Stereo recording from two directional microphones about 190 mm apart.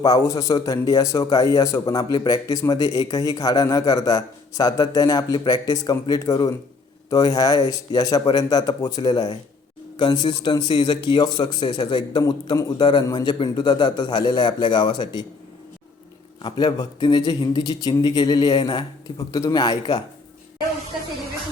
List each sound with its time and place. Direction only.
0.0 s a man's voice: 20° left (ahead or behind)
16.4 s a man's voice: 25° left (ahead or behind)